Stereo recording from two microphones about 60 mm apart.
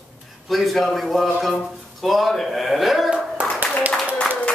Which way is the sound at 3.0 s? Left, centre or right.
Centre.